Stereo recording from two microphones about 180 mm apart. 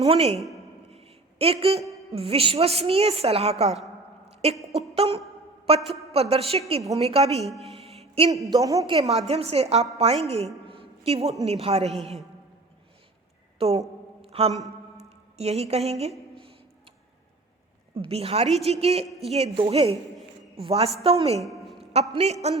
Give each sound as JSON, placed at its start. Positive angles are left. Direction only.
{"t": 0.0, "sound": "a woman's voice", "side_deg": -35}
{"t": 0.3, "sound": "a woman's voice", "side_deg": 0}
{"t": 0.9, "sound": "a sound", "side_deg": -35}
{"t": 2.1, "sound": "a woman's voice", "side_deg": -30}
{"t": 7.4, "sound": "a woman's voice", "side_deg": 0}
{"t": 7.8, "sound": "music", "side_deg": -35}
{"t": 8.4, "sound": "a woman's voice", "side_deg": -20}
{"t": 9.0, "sound": "a woman's voice", "side_deg": -35}
{"t": 13.6, "sound": "a woman's voice", "side_deg": -35}
{"t": 14.2, "sound": "a sound", "side_deg": -35}
{"t": 14.9, "sound": "speech", "side_deg": -35}
{"t": 18.1, "sound": "a woman's voice", "side_deg": -35}
{"t": 21.4, "sound": "a sound", "side_deg": 0}
{"t": 22.1, "sound": "a woman's voice", "side_deg": -35}